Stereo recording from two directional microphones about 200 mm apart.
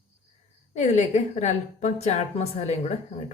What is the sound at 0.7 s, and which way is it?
A woman's voice, 35° left (ahead or behind).